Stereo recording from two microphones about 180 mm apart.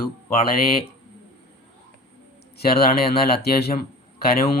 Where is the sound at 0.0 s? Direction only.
55° left (ahead or behind).